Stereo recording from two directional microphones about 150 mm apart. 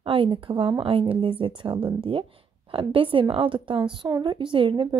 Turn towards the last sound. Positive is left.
turn(degrees=-35)  # may be behind; listen again after turning